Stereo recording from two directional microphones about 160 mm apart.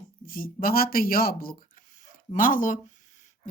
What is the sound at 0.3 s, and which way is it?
Speech, 65° left (ahead or behind).